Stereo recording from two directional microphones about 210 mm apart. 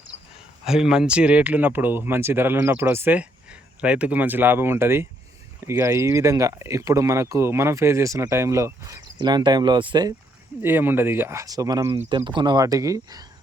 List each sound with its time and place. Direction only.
0.6 s speech: centre (ahead or behind)